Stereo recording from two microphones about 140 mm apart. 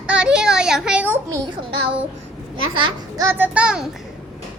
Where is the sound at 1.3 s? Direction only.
25° right (ahead or behind).